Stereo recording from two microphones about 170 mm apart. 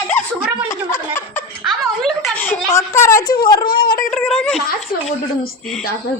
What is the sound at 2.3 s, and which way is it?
A woman's voice, 15° left (ahead or behind).